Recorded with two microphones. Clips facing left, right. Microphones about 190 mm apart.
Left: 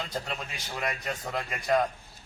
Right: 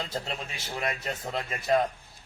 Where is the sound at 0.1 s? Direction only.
25° right (ahead or behind).